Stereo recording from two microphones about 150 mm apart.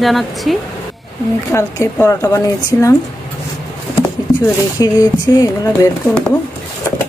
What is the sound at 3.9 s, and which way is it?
Speech, 20° left (ahead or behind).